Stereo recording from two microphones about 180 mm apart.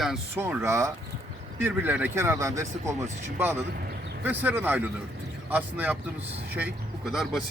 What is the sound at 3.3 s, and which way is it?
Speech, 10° right (ahead or behind).